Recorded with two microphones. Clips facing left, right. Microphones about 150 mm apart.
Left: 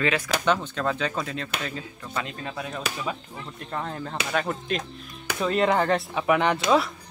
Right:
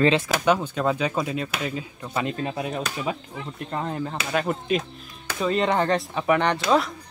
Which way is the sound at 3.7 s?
10° right (ahead or behind).